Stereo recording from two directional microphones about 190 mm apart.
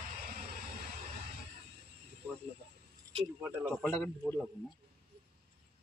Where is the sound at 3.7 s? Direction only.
10° left (ahead or behind).